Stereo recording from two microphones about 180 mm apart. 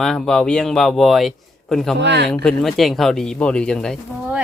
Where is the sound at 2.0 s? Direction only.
70° right (ahead or behind).